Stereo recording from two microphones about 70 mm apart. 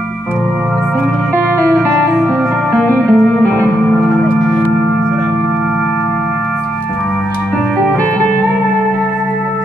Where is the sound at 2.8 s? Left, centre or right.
Left.